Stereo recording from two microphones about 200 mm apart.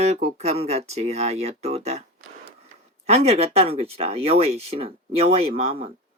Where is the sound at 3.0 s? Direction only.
30° right (ahead or behind).